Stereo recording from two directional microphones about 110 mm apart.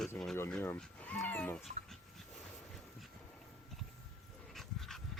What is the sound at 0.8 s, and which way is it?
Speech, 10° left (ahead or behind).